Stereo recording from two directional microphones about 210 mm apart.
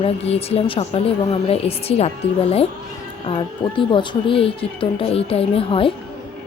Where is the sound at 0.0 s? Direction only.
30° left (ahead or behind).